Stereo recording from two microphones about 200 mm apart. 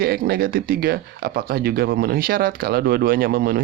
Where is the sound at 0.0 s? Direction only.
50° right (ahead or behind).